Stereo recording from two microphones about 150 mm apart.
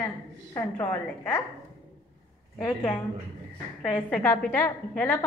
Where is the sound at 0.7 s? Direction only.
15° left (ahead or behind).